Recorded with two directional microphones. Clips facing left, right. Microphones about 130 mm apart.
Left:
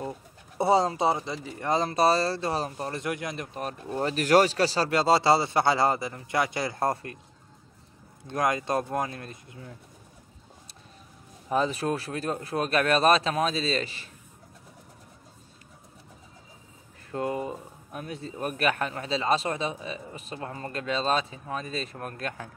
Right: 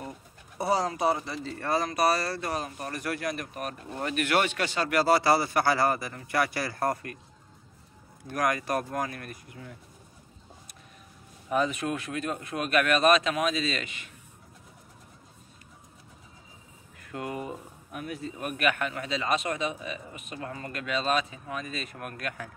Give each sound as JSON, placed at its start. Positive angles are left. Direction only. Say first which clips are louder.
{"t": 0.6, "sound": "speech", "louder": "left 4 dB", "side_deg": 25}
{"t": 8.3, "sound": "speech", "louder": "left 1 dB", "side_deg": 25}
{"t": 11.4, "sound": "speech", "louder": "left 1 dB", "side_deg": 30}
{"t": 17.0, "sound": "speech", "louder": "left 5 dB", "side_deg": 30}